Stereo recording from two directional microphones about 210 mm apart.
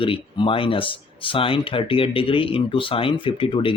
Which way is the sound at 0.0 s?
25° left (ahead or behind).